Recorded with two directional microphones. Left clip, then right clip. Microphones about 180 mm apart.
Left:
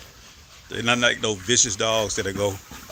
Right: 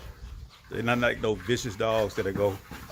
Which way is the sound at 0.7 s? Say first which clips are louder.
Left 5 dB; 20° left (ahead or behind).